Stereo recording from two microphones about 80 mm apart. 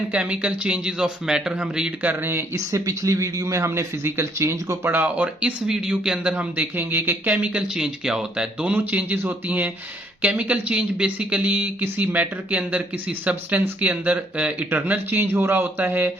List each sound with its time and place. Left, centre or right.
0.1 s speech: centre
2.7 s speech: right
4.9 s speech: right